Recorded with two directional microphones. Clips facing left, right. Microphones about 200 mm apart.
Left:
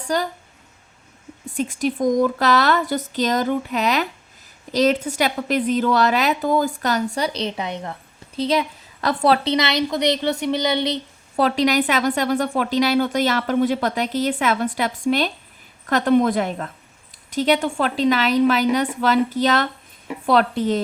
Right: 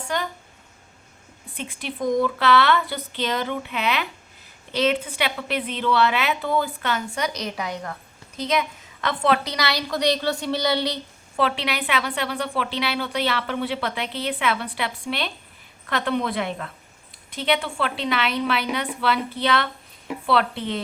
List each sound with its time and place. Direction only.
0.1 s a woman's voice: 35° left (ahead or behind)
1.5 s a woman's voice: 45° left (ahead or behind); by 11.0 s 20° left (ahead or behind)
11.3 s a woman's voice: 40° left (ahead or behind)